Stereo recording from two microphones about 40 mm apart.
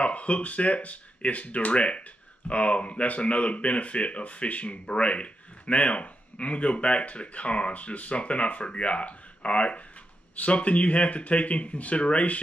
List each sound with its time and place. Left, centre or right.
0.0 s speech: left